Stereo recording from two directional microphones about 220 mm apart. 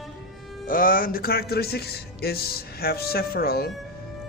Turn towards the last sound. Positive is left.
turn(degrees=45)  # may be behind; listen again after turning